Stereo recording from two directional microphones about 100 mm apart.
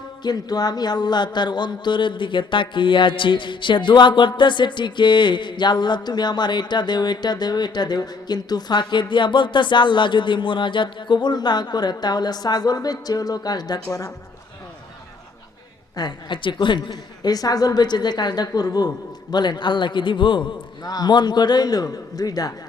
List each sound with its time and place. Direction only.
0.2 s speech: 45° left (ahead or behind)
16.0 s speech: 50° left (ahead or behind)